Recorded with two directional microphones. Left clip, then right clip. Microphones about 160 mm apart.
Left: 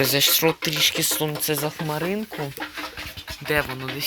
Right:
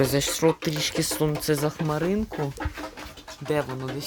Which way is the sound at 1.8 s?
20° right (ahead or behind).